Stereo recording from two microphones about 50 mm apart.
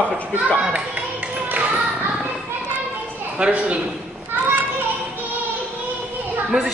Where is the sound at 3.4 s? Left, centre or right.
Right.